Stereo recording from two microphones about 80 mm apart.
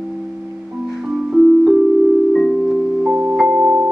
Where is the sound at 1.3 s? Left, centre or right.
Centre.